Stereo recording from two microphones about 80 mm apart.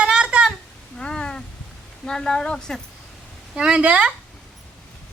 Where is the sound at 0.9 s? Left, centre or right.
Centre.